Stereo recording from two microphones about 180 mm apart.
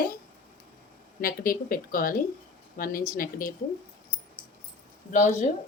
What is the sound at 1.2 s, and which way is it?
A woman's voice, 55° left (ahead or behind).